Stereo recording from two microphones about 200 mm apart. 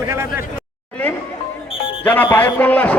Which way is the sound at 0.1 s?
15° right (ahead or behind).